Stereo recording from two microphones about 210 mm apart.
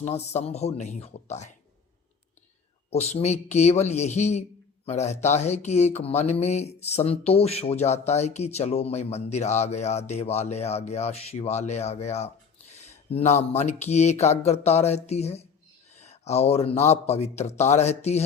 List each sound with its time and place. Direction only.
0.0 s speech: 30° left (ahead or behind)
2.9 s speech: 30° left (ahead or behind)
16.0 s a sound: 30° left (ahead or behind)
16.8 s speech: 30° left (ahead or behind)